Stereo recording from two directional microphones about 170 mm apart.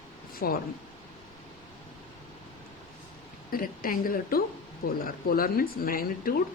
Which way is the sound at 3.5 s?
55° left (ahead or behind).